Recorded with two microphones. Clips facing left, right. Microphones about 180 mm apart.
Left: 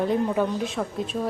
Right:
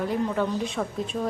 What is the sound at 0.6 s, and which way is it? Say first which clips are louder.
Speech: left 1 dB; centre (ahead or behind).